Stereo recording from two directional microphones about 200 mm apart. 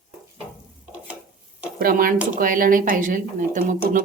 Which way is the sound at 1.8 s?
45° right (ahead or behind).